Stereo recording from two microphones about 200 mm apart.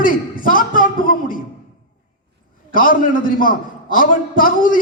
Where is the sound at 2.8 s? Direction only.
45° left (ahead or behind).